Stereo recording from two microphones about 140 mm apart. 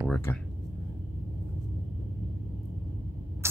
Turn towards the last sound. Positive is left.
turn(degrees=-20)  # may be behind; listen again after turning